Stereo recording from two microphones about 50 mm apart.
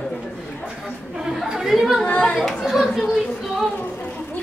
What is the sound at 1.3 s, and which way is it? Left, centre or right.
Chatter, centre.